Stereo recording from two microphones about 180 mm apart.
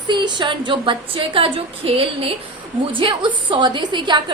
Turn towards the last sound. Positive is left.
turn(degrees=-25)  # may be behind; listen again after turning